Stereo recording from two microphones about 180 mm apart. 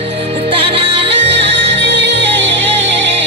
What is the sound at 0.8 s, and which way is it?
Music, 70° right (ahead or behind).